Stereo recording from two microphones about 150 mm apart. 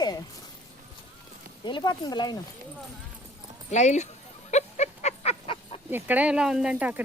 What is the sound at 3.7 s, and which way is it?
Speech, 50° left (ahead or behind).